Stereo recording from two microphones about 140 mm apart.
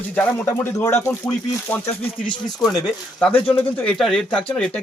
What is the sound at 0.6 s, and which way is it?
Speech, 15° left (ahead or behind).